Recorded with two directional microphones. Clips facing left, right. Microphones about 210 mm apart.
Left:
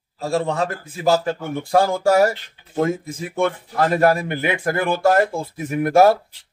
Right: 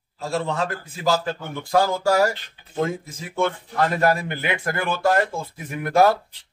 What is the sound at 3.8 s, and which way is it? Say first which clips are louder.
Speech: left 4 dB; 35° left (ahead or behind).